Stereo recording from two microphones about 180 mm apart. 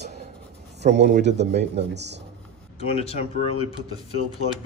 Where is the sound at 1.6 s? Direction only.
70° right (ahead or behind).